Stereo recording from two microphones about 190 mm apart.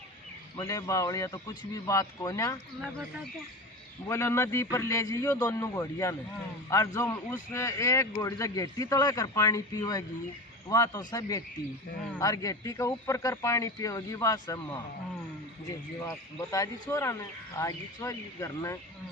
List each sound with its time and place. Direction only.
0.6 s a man's voice: 15° left (ahead or behind)
4.0 s a man's voice: 15° left (ahead or behind)